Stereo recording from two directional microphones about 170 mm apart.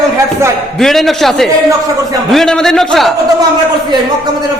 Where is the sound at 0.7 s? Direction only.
Centre (ahead or behind).